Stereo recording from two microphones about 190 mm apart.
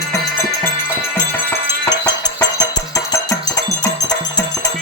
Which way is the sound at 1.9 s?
20° left (ahead or behind).